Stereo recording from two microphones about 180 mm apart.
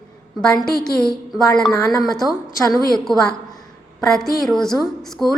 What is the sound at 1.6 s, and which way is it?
Speech, 20° left (ahead or behind).